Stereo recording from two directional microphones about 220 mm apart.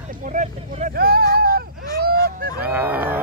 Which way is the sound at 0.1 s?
35° right (ahead or behind).